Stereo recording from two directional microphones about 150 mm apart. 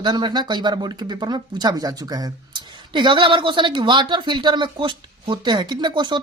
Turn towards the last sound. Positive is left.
turn(degrees=-30)  # may be behind; listen again after turning